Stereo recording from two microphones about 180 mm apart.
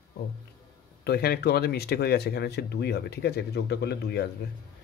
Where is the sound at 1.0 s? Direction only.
65° left (ahead or behind).